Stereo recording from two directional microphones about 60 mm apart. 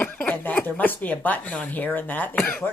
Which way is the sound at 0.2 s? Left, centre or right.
Left.